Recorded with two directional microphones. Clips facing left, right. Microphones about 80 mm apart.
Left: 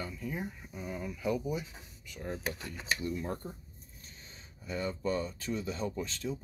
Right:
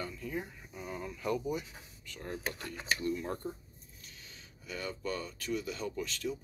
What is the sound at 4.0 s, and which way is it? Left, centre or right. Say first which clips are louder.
Speech: even; left.